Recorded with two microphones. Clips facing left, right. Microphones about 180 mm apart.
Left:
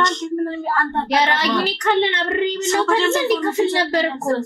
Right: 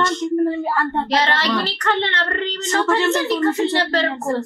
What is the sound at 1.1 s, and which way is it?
Speech, 15° left (ahead or behind).